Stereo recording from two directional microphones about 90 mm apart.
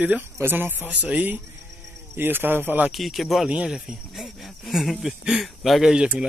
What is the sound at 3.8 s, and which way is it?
Speech, 5° right (ahead or behind).